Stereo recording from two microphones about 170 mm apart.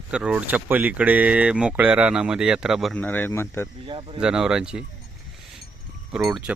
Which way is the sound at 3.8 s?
35° right (ahead or behind).